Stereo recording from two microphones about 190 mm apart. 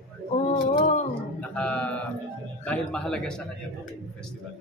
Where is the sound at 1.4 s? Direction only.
5° left (ahead or behind).